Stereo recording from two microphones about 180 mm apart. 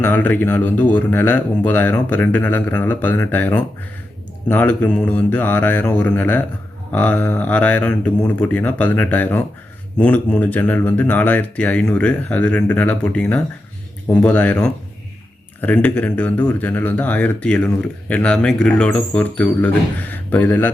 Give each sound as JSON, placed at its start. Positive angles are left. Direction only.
{"t": 0.0, "sound": "speech", "side_deg": 10}